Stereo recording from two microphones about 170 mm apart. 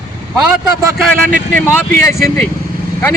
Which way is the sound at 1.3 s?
50° right (ahead or behind).